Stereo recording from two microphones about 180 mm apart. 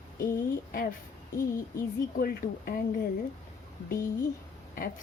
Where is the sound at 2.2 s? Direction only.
55° left (ahead or behind).